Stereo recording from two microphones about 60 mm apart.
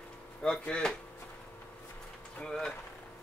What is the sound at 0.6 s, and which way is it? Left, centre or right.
Speech, centre.